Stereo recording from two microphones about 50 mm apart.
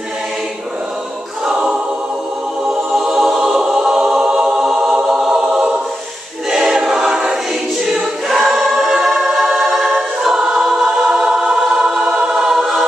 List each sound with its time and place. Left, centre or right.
1.4 s choir: centre
2.9 s music: centre
6.5 s choir: centre